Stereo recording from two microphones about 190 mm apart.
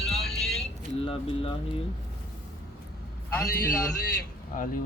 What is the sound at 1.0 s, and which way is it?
Speech, 30° left (ahead or behind).